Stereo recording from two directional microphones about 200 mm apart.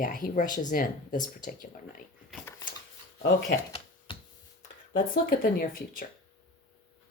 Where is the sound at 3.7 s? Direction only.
25° left (ahead or behind).